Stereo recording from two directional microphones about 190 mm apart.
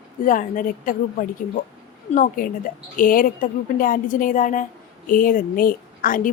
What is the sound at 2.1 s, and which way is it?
A woman's voice, 40° left (ahead or behind).